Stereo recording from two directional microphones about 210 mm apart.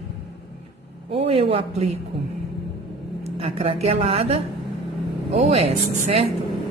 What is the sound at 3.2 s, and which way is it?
A man's voice, 30° right (ahead or behind).